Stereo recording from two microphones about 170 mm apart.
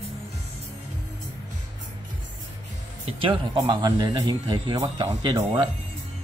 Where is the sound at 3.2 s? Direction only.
25° right (ahead or behind).